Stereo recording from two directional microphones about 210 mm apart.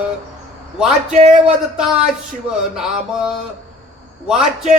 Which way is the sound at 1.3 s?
5° right (ahead or behind).